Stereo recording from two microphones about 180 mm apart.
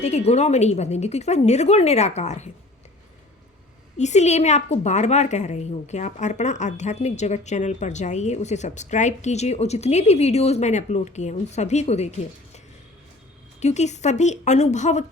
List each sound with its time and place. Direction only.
0.0 s a woman's voice: 35° left (ahead or behind)
3.9 s a woman's voice: 40° left (ahead or behind)
13.6 s a woman's voice: 40° left (ahead or behind)